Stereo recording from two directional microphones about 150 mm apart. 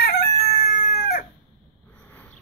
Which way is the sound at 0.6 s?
70° left (ahead or behind).